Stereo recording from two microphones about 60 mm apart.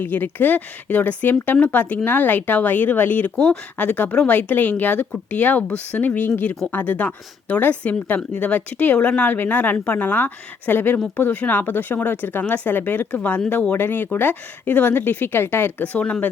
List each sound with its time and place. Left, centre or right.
0.0 s speech: left